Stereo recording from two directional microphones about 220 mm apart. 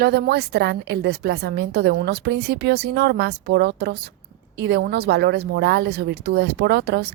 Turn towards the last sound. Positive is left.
turn(degrees=-50)  # may be behind; listen again after turning